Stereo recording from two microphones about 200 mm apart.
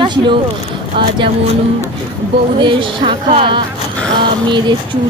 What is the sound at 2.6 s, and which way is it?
Speech, 25° right (ahead or behind).